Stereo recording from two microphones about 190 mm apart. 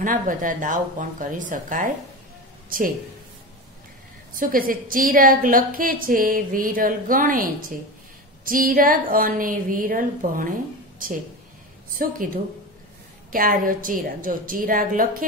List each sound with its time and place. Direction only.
0.0 s a woman's voice: 45° right (ahead or behind)
4.4 s a woman's voice: 45° right (ahead or behind)
8.5 s a woman's voice: 45° right (ahead or behind)
13.3 s a woman's voice: 50° right (ahead or behind)